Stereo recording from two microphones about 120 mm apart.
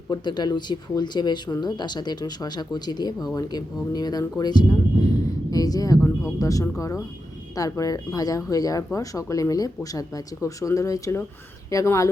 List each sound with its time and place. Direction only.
0.1 s speech: 35° left (ahead or behind)